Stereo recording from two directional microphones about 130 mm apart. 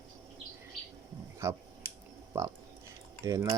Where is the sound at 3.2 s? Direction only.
25° right (ahead or behind).